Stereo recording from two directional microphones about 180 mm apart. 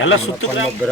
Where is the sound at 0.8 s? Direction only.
10° left (ahead or behind).